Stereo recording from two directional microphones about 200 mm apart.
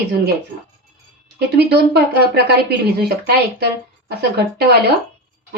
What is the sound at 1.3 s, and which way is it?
A woman's voice, 55° right (ahead or behind).